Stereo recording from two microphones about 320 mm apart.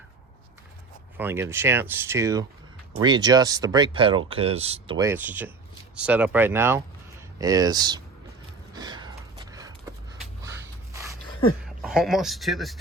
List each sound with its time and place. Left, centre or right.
1.1 s speech: centre
8.7 s a sound: centre
11.6 s speech: centre